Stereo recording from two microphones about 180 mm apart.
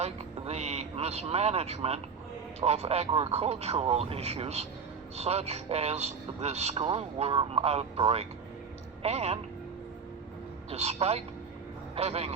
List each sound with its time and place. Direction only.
0.0 s vehicle: 35° right (ahead or behind)
2.6 s a man's voice: 35° right (ahead or behind)
10.7 s a man's voice: 35° right (ahead or behind)